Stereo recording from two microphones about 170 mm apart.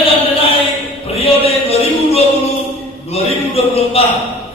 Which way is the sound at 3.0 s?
35° left (ahead or behind).